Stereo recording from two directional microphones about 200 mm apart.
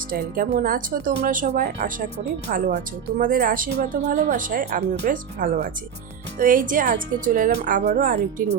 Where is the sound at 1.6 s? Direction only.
60° right (ahead or behind).